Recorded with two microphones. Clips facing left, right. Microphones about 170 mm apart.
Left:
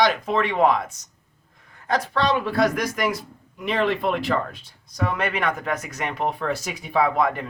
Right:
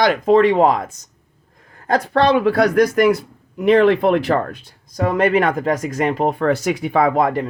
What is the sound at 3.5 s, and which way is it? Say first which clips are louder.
Speech: right 10 dB; 60° right (ahead or behind).